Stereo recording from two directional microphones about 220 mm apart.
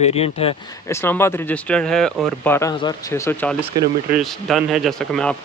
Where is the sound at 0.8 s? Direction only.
10° left (ahead or behind).